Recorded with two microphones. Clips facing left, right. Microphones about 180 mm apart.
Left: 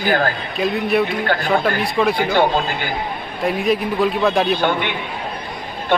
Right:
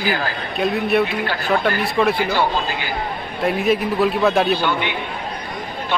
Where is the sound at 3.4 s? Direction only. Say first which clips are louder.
Even; centre (ahead or behind).